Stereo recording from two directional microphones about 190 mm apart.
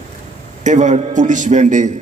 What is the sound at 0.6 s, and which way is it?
A man's voice, 40° right (ahead or behind).